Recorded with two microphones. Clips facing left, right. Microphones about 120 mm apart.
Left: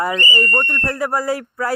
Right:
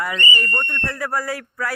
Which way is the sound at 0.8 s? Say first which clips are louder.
Left 4 dB; 30° left (ahead or behind).